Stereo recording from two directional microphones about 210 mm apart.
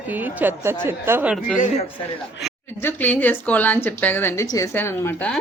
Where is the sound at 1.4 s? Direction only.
35° left (ahead or behind).